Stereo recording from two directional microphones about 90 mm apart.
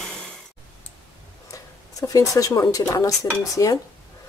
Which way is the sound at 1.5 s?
40° left (ahead or behind).